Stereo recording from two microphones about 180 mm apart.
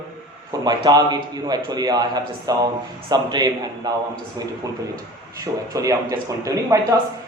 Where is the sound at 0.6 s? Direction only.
20° right (ahead or behind).